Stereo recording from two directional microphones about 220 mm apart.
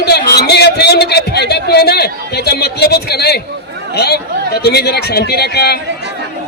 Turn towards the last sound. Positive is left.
turn(degrees=45)  # may be behind; listen again after turning